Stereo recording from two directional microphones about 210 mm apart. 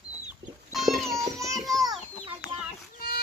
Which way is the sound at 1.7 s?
15° right (ahead or behind).